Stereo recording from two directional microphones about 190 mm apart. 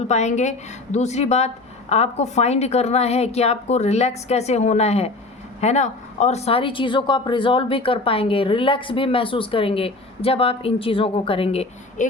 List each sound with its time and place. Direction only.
0.1 s a woman's voice: 35° left (ahead or behind)